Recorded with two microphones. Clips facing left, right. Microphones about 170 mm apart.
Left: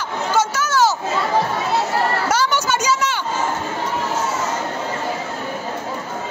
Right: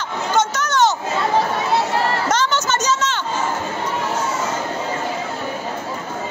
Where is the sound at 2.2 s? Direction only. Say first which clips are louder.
Even; 10° left (ahead or behind).